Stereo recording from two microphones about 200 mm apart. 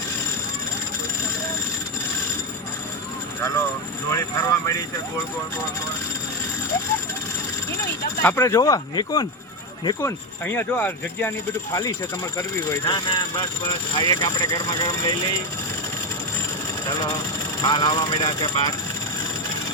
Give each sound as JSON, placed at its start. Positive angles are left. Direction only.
{"t": 4.1, "sound": "speech", "side_deg": 15}
{"t": 8.2, "sound": "speech", "side_deg": 10}
{"t": 16.8, "sound": "speech", "side_deg": 15}